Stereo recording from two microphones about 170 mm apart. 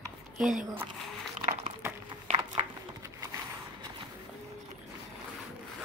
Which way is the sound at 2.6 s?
35° right (ahead or behind).